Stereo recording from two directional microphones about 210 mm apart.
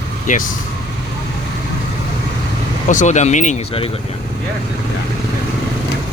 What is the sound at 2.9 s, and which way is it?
Speech, 35° left (ahead or behind).